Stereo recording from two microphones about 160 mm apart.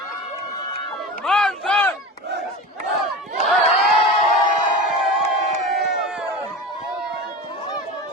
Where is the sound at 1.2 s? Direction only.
5° left (ahead or behind).